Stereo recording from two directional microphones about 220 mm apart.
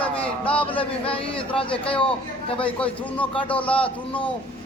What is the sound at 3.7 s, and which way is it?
Speech, 25° left (ahead or behind).